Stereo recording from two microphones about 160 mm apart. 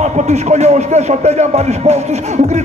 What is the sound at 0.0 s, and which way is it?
A man's voice, 45° right (ahead or behind).